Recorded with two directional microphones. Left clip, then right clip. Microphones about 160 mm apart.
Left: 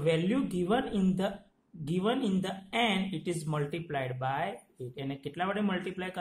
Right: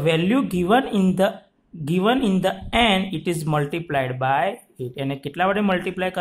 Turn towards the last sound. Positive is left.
turn(degrees=-35)  # may be behind; listen again after turning